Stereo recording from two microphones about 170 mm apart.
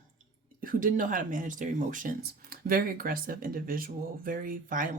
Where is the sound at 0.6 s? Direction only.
55° right (ahead or behind).